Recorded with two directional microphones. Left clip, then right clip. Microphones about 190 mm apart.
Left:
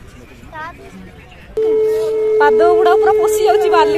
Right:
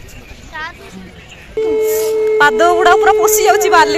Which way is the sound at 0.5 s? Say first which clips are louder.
Right 3 dB; 40° left (ahead or behind).